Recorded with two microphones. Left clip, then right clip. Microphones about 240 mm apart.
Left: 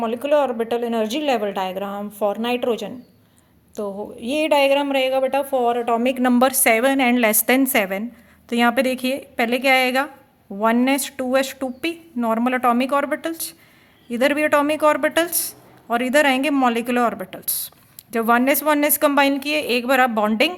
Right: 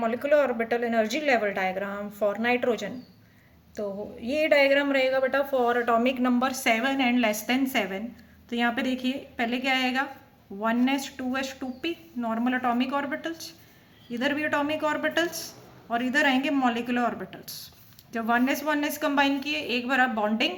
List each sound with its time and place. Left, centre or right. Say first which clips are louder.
0.0 s speech: left 4 dB; left
4.4 s speech: left 4 dB; centre
4.8 s speech: left 4 dB; left
6.4 s speech: left 10 dB; left